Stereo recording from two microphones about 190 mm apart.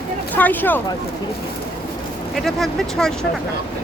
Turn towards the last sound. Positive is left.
turn(degrees=0)  # may be behind; listen again after turning